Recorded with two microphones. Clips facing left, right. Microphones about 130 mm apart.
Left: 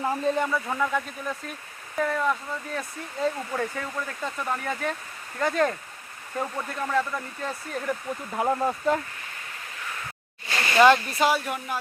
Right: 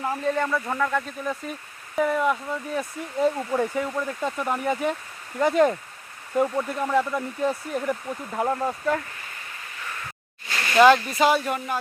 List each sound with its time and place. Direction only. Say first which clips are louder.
0.0 s speech: even; 20° left (ahead or behind)
0.4 s speech: right 1 dB; 5° left (ahead or behind); by 7.9 s 15° right (ahead or behind)
8.4 s speech: even; 15° left (ahead or behind)
10.8 s speech: right 2 dB; centre (ahead or behind)